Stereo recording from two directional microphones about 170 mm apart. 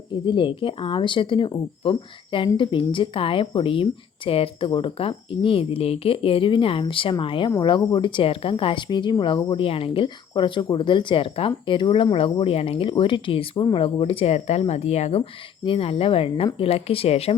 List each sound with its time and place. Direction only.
0.1 s a woman's voice: 30° left (ahead or behind)